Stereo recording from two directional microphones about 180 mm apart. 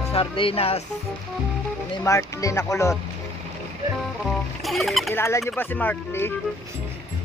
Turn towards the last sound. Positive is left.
turn(degrees=10)  # may be behind; listen again after turning